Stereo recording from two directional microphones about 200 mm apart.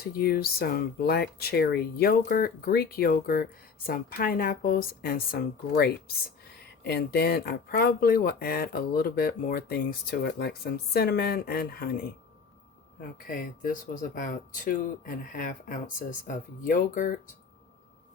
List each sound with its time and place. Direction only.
0.0 s speech: 50° left (ahead or behind)